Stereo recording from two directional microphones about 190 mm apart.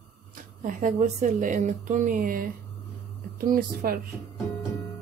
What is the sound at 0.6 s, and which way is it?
A woman's voice, 45° right (ahead or behind).